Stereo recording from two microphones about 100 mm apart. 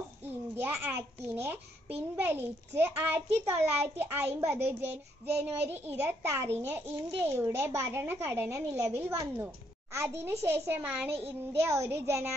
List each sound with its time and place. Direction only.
0.3 s a child's voice: 20° right (ahead or behind)
11.5 s a child's voice: 30° right (ahead or behind)